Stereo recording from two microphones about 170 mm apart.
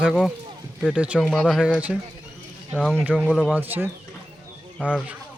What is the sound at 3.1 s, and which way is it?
Speech, 5° right (ahead or behind).